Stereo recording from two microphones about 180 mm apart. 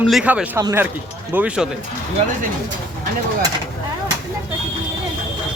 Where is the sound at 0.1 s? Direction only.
5° right (ahead or behind).